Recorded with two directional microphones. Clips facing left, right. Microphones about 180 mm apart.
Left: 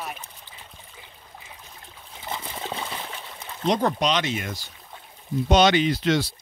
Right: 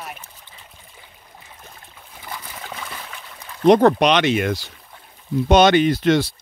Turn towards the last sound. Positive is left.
turn(degrees=-55)  # may be behind; listen again after turning